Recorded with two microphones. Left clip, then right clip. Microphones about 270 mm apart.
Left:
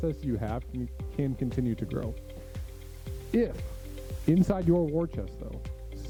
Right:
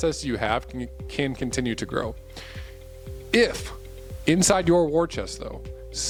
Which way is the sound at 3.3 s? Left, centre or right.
Centre.